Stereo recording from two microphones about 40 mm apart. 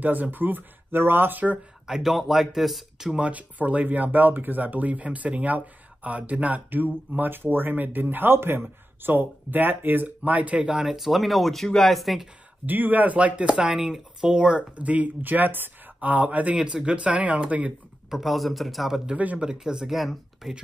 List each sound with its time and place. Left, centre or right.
0.0 s speech: right
1.9 s speech: centre
3.2 s speech: right
10.8 s speech: centre
12.6 s speech: right
13.4 s speech: right
13.7 s speech: centre
14.3 s speech: right
14.8 s speech: right
16.0 s speech: right
16.5 s speech: right
18.1 s speech: centre
19.3 s speech: right
19.9 s speech: centre